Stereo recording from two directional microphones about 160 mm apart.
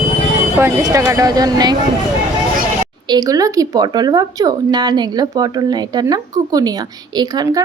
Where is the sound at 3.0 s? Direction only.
25° right (ahead or behind).